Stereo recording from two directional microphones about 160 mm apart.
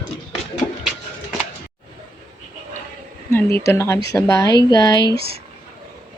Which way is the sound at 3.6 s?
15° left (ahead or behind).